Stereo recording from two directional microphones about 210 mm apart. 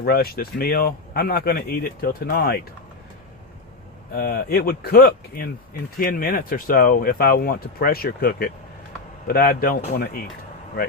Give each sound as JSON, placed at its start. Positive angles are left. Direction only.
{"t": 0.0, "sound": "speech", "side_deg": 45}
{"t": 4.1, "sound": "speech", "side_deg": 45}